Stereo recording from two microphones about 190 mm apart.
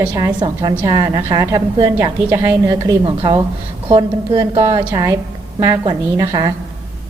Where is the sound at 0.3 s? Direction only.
20° right (ahead or behind).